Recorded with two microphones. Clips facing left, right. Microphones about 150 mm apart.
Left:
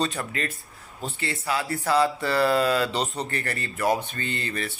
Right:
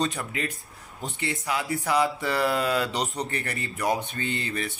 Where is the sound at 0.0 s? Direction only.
20° right (ahead or behind).